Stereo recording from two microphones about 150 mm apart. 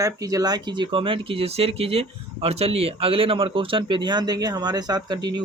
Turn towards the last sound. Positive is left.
turn(degrees=-30)  # may be behind; listen again after turning